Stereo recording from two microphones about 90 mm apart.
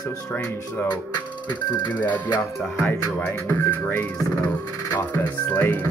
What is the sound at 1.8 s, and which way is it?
Speech, 15° left (ahead or behind).